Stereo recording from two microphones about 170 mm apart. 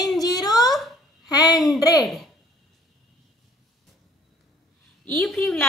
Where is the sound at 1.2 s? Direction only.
20° left (ahead or behind).